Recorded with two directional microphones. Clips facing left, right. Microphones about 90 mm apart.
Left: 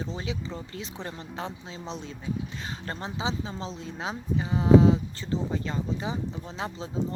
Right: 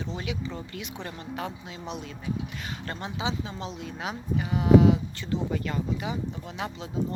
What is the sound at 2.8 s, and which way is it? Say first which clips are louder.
Speech: even; 30° left (ahead or behind).